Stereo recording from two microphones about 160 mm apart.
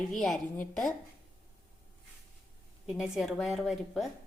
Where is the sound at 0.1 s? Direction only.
Centre (ahead or behind).